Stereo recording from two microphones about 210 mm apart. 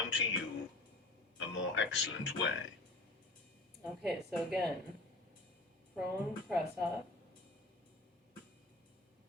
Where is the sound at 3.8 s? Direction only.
Centre (ahead or behind).